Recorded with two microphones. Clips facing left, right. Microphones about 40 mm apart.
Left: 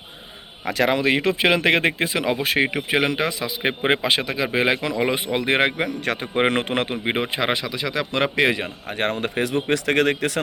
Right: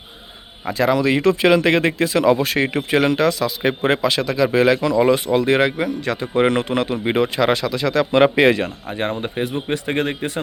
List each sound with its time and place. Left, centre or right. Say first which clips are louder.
0.6 s speech: right 2 dB; left
0.9 s speech: right 3 dB; left
2.1 s speech: right 5 dB; centre
8.1 s speech: right 7 dB; centre
8.9 s speech: even; left